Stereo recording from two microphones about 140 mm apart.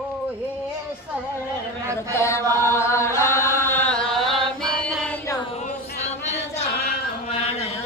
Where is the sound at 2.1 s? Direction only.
20° left (ahead or behind).